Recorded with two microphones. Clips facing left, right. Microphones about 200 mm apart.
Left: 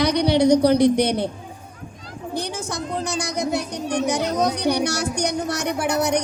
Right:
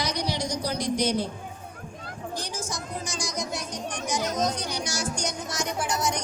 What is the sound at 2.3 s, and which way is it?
A woman's voice, 60° left (ahead or behind).